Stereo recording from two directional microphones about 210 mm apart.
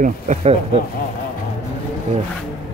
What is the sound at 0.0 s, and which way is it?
Speech, 30° right (ahead or behind).